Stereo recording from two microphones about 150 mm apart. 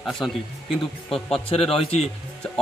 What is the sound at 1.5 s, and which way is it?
Speech, 40° left (ahead or behind).